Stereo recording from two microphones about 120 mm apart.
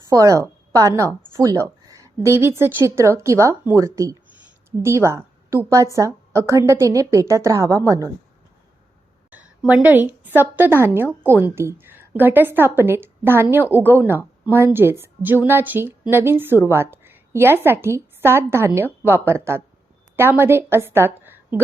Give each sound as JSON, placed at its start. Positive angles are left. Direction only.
{"t": 0.1, "sound": "a woman's voice", "side_deg": -25}
{"t": 9.3, "sound": "a woman's voice", "side_deg": -15}